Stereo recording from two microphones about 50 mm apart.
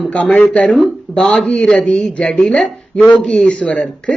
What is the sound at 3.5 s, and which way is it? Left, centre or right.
Speech, left.